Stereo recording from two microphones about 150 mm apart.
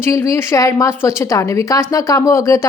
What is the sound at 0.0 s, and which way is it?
Speech, 20° left (ahead or behind).